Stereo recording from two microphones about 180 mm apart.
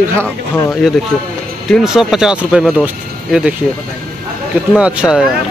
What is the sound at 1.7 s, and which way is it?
Speech, 5° right (ahead or behind).